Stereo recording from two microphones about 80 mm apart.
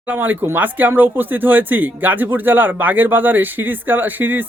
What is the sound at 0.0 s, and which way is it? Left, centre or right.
Speech, right.